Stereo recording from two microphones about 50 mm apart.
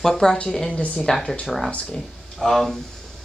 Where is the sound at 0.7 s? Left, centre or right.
Left.